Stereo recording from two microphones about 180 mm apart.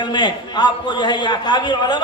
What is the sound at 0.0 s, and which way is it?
A man's voice, 25° left (ahead or behind).